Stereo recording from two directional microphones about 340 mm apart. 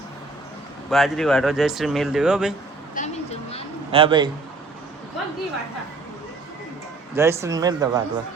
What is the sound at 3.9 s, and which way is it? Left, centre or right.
Speech, centre.